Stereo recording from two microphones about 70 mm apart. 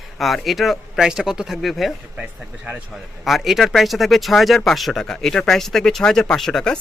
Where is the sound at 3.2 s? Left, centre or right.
Centre.